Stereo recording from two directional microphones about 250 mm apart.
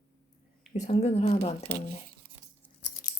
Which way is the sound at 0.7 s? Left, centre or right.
Left.